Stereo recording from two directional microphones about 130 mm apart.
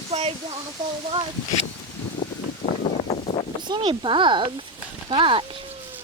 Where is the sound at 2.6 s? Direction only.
55° left (ahead or behind).